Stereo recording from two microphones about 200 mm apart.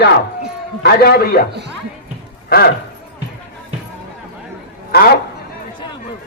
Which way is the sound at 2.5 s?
45° left (ahead or behind).